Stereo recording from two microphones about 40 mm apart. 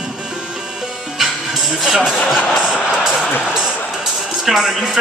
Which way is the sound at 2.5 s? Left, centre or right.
Centre.